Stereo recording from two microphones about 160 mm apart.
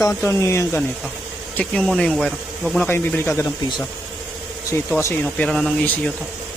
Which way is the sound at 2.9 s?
15° left (ahead or behind).